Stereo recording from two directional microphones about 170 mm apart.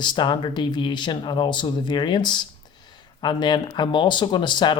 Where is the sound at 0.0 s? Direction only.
25° left (ahead or behind).